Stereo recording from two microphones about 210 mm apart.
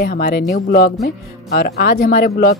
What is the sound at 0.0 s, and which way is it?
Speech, 50° left (ahead or behind).